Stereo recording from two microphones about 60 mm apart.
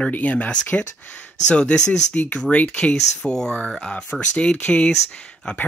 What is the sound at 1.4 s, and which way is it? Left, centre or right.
Speech, centre.